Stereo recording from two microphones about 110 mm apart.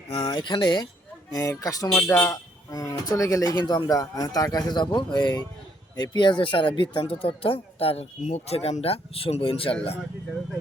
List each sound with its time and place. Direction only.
0.3 s speech: 40° left (ahead or behind)
2.0 s speech: 20° left (ahead or behind)
3.5 s speech: 45° left (ahead or behind)